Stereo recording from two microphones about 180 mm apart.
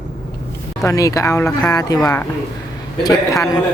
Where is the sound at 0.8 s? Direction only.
20° left (ahead or behind).